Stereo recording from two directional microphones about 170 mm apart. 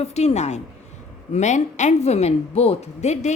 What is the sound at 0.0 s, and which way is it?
A woman's voice, 40° left (ahead or behind).